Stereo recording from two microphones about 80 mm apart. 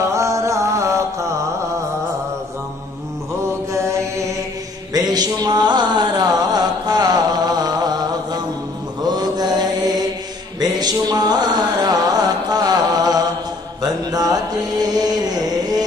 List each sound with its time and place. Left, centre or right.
0.1 s music: right
3.4 s mantra: right
4.9 s music: right
9.0 s mantra: right
10.6 s music: right
13.8 s chant: right